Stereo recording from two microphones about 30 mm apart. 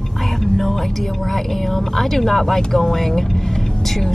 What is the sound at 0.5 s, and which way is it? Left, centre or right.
Speech, centre.